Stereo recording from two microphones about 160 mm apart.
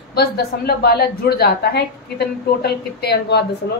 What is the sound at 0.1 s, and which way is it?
A woman's voice, 80° left.